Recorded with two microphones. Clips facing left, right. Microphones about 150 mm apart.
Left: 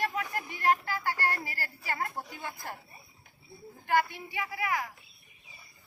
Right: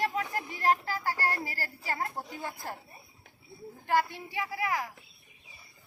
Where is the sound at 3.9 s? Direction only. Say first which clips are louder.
Even; 35° right (ahead or behind).